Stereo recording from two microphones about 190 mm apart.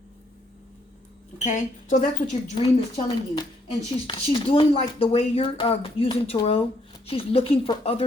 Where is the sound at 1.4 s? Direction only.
40° left (ahead or behind).